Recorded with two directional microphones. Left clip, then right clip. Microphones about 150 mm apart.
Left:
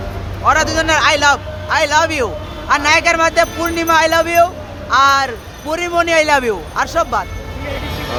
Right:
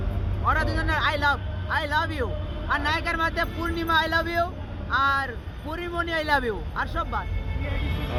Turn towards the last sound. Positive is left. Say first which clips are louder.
# left 13 dB
turn(degrees=20)  # may be behind; listen again after turning